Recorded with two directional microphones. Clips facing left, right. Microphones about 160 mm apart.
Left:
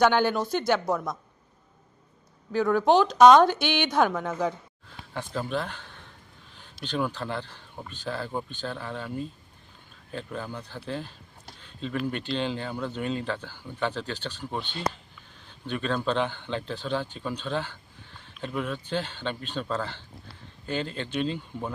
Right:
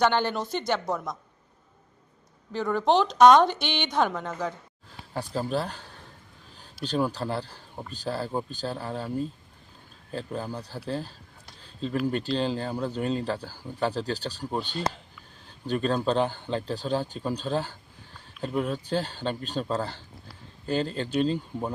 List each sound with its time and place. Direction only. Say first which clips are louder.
0.0 s a woman's voice: left 2 dB; 10° left (ahead or behind)
2.5 s a woman's voice: left 2 dB; 5° left (ahead or behind)
5.1 s speech: right 2 dB; 35° right (ahead or behind)
11.6 s a sound: right 3 dB; 35° right (ahead or behind)
12.1 s speech: right 3 dB; 35° right (ahead or behind)